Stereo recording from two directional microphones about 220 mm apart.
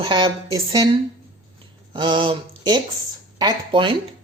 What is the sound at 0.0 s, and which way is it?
A woman's voice, 20° right (ahead or behind).